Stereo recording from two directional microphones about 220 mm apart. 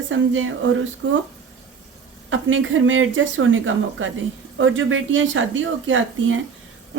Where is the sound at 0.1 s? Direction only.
65° right (ahead or behind).